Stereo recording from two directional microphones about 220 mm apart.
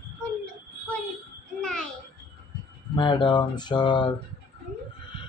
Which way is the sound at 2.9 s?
20° left (ahead or behind).